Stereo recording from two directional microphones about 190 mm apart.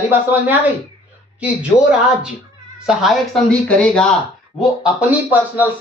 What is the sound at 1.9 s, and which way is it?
Speech, 5° right (ahead or behind).